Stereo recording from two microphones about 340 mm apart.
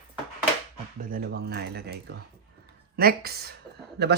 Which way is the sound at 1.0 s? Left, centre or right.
Right.